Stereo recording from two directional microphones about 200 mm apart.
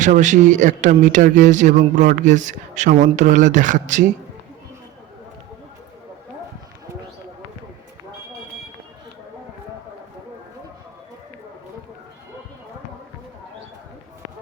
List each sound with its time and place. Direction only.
0.0 s speech: 35° right (ahead or behind)